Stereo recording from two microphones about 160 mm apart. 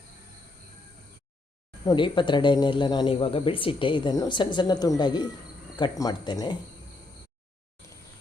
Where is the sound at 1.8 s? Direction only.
30° left (ahead or behind).